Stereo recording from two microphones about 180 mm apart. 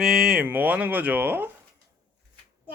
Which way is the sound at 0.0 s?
Centre (ahead or behind).